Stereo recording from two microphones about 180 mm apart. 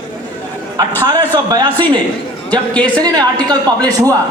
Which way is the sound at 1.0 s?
20° right (ahead or behind).